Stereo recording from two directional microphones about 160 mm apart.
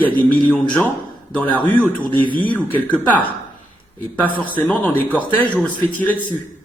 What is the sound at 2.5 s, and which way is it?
Speech, 10° left (ahead or behind).